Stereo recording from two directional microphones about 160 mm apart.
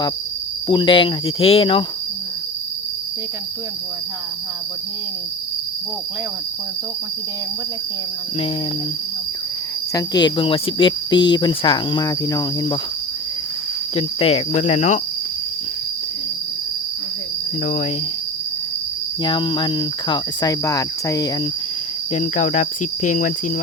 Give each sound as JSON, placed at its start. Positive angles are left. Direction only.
{"t": 0.7, "sound": "speech", "side_deg": 30}
{"t": 9.9, "sound": "cricket", "side_deg": 25}
{"t": 13.9, "sound": "cricket", "side_deg": 35}
{"t": 19.2, "sound": "cricket", "side_deg": 30}
{"t": 22.1, "sound": "cricket", "side_deg": 45}